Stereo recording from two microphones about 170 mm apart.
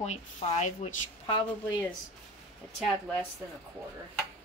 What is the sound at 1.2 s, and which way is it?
Speech, 30° left (ahead or behind).